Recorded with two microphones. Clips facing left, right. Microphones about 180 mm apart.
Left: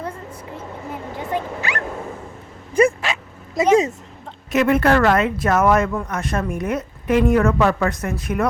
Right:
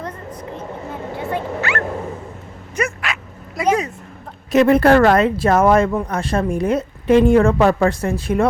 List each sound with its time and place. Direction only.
0.0 s a sound: 10° left (ahead or behind)
1.3 s speech: 15° left (ahead or behind)
2.7 s bow-wow: 30° left (ahead or behind)
4.5 s a woman's voice: 35° right (ahead or behind)